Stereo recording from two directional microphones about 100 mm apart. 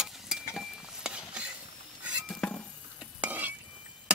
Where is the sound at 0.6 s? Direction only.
5° right (ahead or behind).